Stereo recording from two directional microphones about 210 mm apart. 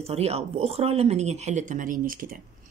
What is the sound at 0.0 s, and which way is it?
Speech, 30° right (ahead or behind).